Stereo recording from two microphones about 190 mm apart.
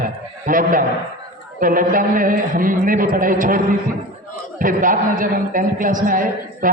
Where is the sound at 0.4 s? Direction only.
45° right (ahead or behind).